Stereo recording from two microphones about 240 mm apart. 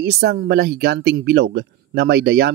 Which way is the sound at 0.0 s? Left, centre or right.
Right.